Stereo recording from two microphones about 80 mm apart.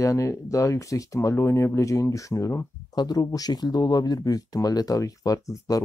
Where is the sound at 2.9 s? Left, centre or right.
Left.